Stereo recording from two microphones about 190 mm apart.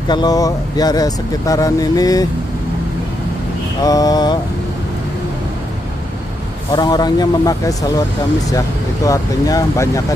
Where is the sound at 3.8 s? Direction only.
20° left (ahead or behind).